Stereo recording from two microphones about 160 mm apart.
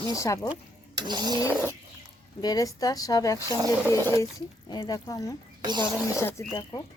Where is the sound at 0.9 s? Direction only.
25° right (ahead or behind).